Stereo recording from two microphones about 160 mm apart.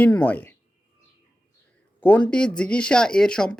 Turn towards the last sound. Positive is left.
turn(degrees=5)  # may be behind; listen again after turning